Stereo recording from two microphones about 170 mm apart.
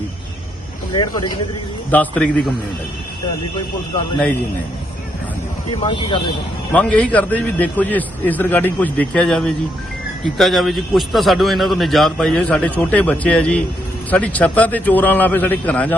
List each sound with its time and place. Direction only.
0.9 s speech: 25° left (ahead or behind)
1.9 s a man's voice: 10° left (ahead or behind)
5.8 s speech: 30° left (ahead or behind)
6.7 s a man's voice: 5° left (ahead or behind)